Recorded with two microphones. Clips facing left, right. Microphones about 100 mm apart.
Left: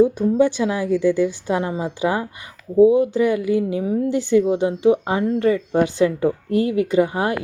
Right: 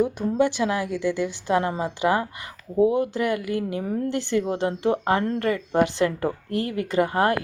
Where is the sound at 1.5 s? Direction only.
20° left (ahead or behind).